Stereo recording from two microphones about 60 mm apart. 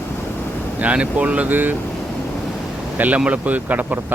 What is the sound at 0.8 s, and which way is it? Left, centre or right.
Speech, right.